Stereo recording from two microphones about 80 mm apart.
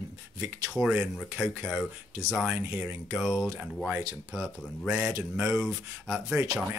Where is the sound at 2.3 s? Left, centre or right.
Centre.